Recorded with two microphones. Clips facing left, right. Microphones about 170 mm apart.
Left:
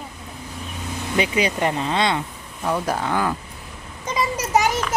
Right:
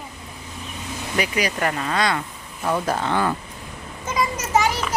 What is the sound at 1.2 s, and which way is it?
Speech, 25° left (ahead or behind).